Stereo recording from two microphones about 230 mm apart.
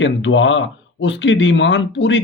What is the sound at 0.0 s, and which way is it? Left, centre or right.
Speech, left.